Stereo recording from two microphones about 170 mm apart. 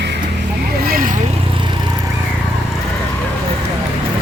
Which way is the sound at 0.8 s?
55° right (ahead or behind).